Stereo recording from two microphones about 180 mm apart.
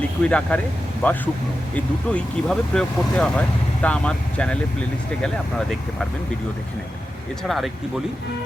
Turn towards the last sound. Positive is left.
turn(degrees=0)  # may be behind; listen again after turning